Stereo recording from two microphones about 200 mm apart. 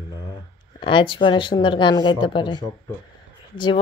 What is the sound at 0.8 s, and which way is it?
Speech, 25° left (ahead or behind).